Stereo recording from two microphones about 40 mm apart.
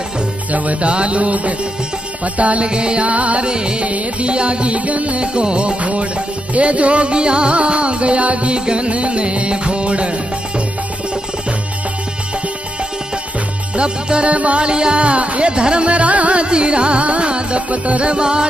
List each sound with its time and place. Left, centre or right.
0.5 s music: right
3.4 s music: right
13.7 s music: right